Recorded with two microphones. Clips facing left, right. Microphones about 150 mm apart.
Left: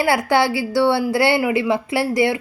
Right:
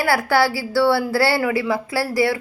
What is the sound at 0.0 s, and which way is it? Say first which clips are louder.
A woman's voice: left 1 dB; 20° left (ahead or behind).